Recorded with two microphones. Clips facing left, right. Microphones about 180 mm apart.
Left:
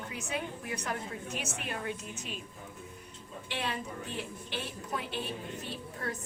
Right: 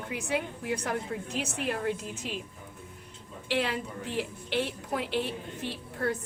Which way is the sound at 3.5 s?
70° right (ahead or behind).